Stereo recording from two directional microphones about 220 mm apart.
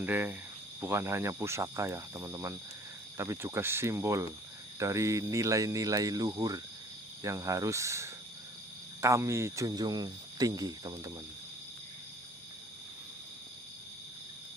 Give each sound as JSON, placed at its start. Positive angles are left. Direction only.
{"t": 0.0, "sound": "speech", "side_deg": -10}